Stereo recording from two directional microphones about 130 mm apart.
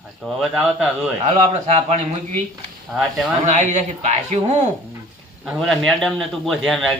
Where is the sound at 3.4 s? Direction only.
70° right (ahead or behind).